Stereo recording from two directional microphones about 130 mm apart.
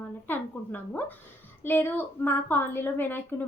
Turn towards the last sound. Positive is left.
turn(degrees=15)  # may be behind; listen again after turning